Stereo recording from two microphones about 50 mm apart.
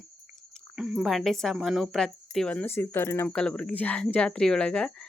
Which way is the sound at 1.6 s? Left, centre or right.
Centre.